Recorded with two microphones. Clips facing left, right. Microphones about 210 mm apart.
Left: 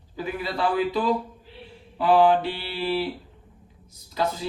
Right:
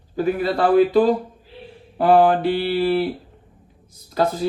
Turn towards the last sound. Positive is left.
turn(degrees=-50)  # may be behind; listen again after turning